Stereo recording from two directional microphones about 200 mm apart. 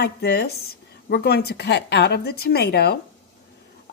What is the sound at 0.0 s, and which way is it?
A woman's voice, 55° left (ahead or behind).